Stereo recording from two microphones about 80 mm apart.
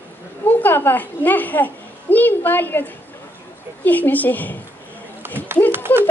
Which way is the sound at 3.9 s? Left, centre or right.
Left.